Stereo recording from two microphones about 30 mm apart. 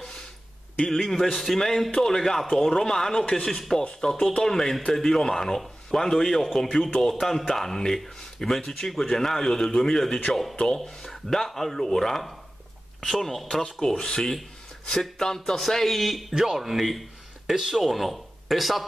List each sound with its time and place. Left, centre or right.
0.9 s speech: centre
4.0 s speech: left
15.6 s a man's voice: centre